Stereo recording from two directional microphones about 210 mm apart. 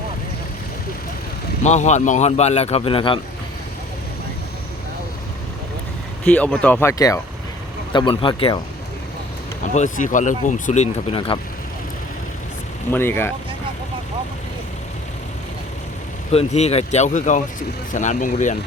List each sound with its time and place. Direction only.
1.6 s speech: 35° left (ahead or behind)
6.2 s speech: 5° left (ahead or behind); by 8.5 s 25° left (ahead or behind)
9.7 s speech: 35° left (ahead or behind)
12.9 s speech: 10° left (ahead or behind)
16.3 s speech: 30° left (ahead or behind)